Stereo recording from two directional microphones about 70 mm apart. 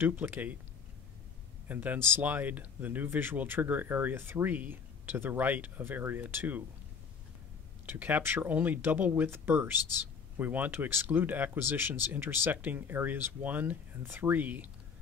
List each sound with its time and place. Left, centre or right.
0.0 s speech: right
1.7 s speech: right
7.8 s speech: right